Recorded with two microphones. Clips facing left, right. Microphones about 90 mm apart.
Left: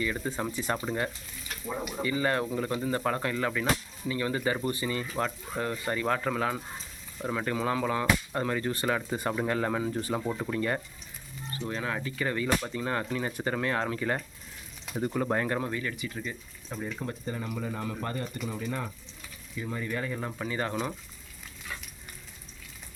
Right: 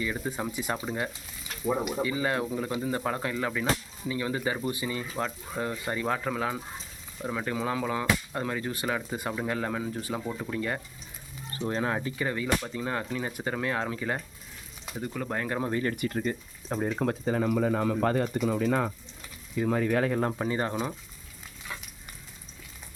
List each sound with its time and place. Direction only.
0.0 s speech: 10° right (ahead or behind); by 10.5 s 10° left (ahead or behind)
10.5 s speech: centre (ahead or behind)
11.5 s speech: 30° right (ahead or behind); by 14.2 s 5° right (ahead or behind)
14.9 s speech: 10° left (ahead or behind)
15.7 s speech: 40° right (ahead or behind)
17.0 s speech: 85° right
19.5 s speech: 70° right (ahead or behind)
20.4 s speech: 30° right (ahead or behind)